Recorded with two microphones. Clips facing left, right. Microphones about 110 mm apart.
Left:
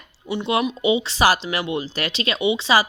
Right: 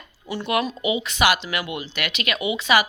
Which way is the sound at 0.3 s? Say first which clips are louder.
Left 2 dB; 20° left (ahead or behind).